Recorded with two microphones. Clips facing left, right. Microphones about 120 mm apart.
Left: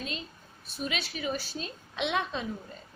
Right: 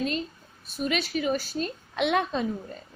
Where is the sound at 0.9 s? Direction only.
45° right (ahead or behind).